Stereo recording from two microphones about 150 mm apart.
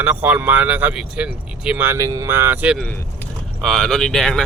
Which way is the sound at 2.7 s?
10° left (ahead or behind).